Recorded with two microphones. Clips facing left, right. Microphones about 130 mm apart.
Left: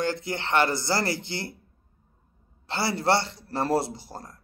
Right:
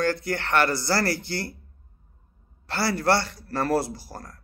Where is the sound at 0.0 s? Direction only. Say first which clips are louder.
Right 3 dB; 20° left (ahead or behind).